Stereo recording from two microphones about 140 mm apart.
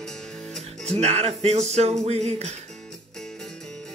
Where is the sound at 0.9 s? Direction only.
50° right (ahead or behind).